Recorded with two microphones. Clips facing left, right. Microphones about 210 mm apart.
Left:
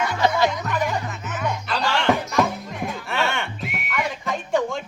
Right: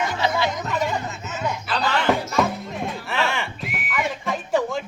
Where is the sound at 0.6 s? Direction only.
25° right (ahead or behind).